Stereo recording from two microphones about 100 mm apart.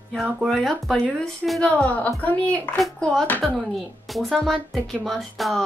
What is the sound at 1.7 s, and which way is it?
Speech, 15° left (ahead or behind).